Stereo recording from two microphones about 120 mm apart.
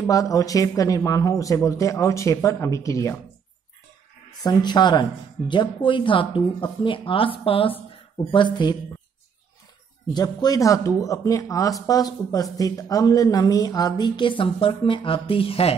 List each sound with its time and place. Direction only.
0.0 s speech: 30° left (ahead or behind)
4.4 s speech: 35° left (ahead or behind)
10.1 s speech: 35° left (ahead or behind); by 15.7 s 50° left (ahead or behind)